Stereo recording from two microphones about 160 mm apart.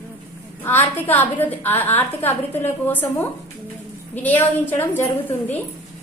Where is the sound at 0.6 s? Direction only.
15° left (ahead or behind).